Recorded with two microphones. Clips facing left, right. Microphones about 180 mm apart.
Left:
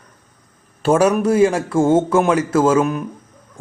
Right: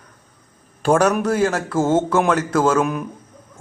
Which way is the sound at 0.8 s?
5° left (ahead or behind).